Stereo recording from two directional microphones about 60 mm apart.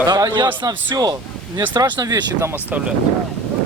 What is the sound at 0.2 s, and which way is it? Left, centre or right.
A man's voice, right.